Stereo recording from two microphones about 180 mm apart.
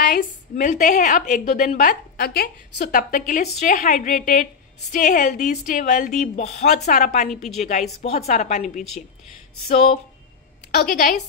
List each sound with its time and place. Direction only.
0.0 s a woman's voice: 45° left (ahead or behind)
10.8 s a woman's voice: 50° left (ahead or behind)